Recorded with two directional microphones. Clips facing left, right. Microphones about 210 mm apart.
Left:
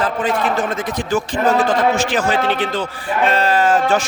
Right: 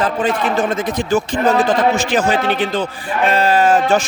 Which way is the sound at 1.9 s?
15° right (ahead or behind).